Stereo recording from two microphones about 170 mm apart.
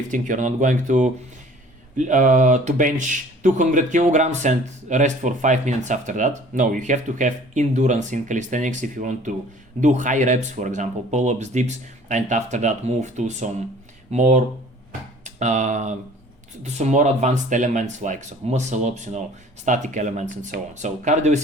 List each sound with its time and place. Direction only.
0.1 s speech: 50° right (ahead or behind)